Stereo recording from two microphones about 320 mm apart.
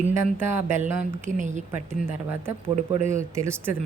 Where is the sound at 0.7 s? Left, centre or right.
Right.